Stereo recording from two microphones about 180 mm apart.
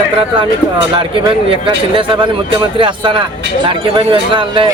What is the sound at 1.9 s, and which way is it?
Speech, 30° right (ahead or behind).